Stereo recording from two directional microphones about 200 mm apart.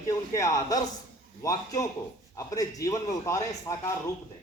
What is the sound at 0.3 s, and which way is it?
A man's voice, 15° left (ahead or behind).